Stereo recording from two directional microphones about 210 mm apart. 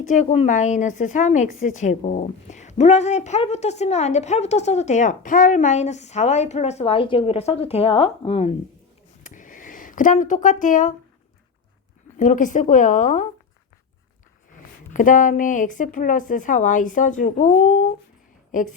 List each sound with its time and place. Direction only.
0.0 s a woman's voice: 35° left (ahead or behind)
9.2 s a sound: 40° left (ahead or behind)
12.1 s a woman's voice: 35° left (ahead or behind)
14.9 s a woman's voice: 40° left (ahead or behind)